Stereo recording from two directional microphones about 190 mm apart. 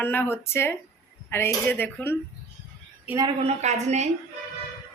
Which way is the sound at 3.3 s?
35° right (ahead or behind).